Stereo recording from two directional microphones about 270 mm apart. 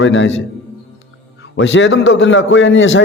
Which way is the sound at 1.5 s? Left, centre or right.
Left.